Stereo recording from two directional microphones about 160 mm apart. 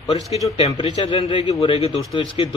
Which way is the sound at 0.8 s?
40° left (ahead or behind).